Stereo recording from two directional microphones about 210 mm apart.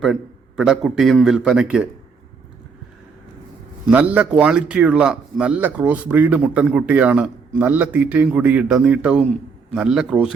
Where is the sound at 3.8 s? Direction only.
5° right (ahead or behind).